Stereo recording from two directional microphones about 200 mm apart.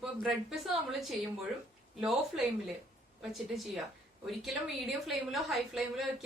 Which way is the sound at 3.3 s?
Centre (ahead or behind).